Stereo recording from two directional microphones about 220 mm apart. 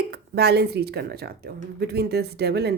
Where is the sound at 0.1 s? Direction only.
45° right (ahead or behind).